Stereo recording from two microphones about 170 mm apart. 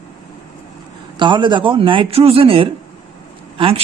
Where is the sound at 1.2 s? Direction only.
30° right (ahead or behind).